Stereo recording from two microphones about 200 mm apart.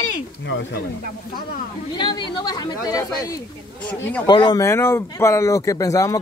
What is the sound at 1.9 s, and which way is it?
Speech, 20° left (ahead or behind).